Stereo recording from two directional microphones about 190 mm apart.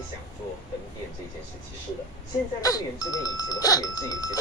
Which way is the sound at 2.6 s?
20° left (ahead or behind).